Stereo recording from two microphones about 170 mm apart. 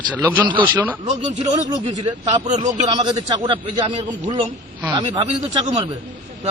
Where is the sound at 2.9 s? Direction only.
25° right (ahead or behind).